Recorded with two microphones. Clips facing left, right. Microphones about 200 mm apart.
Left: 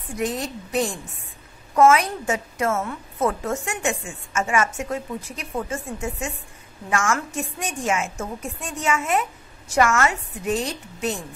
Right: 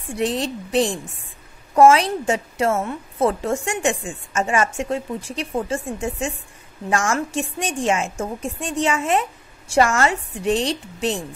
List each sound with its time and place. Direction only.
0.1 s a woman's voice: 30° right (ahead or behind)